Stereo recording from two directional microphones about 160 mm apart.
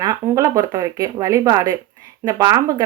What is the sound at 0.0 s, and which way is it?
Speech, 20° right (ahead or behind).